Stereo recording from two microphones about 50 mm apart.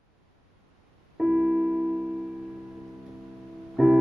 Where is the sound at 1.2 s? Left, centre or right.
Centre.